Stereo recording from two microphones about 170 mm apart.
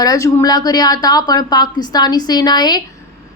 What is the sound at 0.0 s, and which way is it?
Speech, 20° left (ahead or behind).